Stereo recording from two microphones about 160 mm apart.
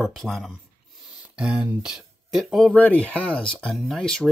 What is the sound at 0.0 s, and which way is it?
Speech, centre (ahead or behind).